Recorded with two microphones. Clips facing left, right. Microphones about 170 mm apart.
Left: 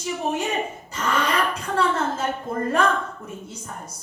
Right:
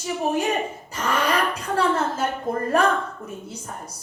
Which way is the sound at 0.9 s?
30° right (ahead or behind).